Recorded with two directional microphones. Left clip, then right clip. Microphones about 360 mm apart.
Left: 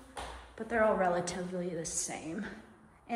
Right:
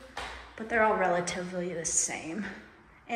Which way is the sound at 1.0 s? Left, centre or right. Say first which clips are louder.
Right 3 dB; left.